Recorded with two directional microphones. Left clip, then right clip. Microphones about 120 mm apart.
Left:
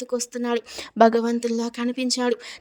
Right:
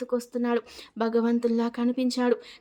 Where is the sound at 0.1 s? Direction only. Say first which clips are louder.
Left 2 dB; 75° left (ahead or behind).